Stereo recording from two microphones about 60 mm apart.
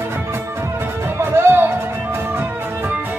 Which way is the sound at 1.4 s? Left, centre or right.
Right.